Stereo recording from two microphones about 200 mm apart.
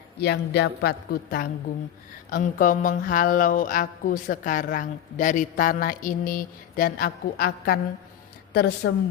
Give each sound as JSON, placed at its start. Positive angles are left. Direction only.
{"t": 0.2, "sound": "speech", "side_deg": 55}